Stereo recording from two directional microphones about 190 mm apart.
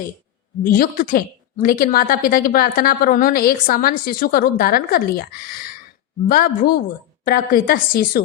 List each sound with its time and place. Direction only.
0.6 s a woman's voice: 45° left (ahead or behind)